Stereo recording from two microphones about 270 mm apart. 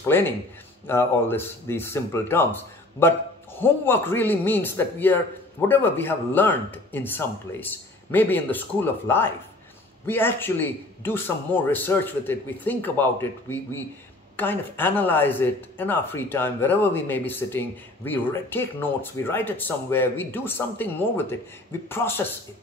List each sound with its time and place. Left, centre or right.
0.8 s speech: centre